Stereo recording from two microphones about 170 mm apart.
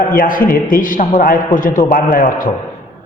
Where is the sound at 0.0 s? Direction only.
55° left (ahead or behind).